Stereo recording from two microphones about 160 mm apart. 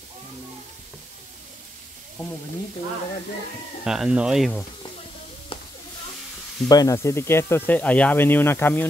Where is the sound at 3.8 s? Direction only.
5° right (ahead or behind).